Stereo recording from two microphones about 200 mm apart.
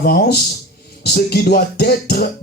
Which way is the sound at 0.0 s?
50° left (ahead or behind).